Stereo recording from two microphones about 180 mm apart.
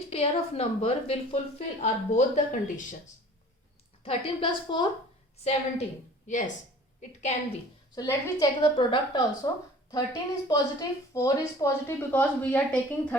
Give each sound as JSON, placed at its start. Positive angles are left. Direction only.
{"t": 0.1, "sound": "a woman's voice", "side_deg": 35}
{"t": 4.0, "sound": "a woman's voice", "side_deg": 30}
{"t": 7.9, "sound": "a woman's voice", "side_deg": 20}